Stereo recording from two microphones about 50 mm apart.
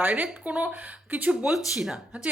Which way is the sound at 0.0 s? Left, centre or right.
Right.